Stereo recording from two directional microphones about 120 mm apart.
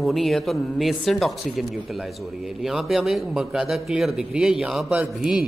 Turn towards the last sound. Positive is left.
turn(degrees=-5)  # may be behind; listen again after turning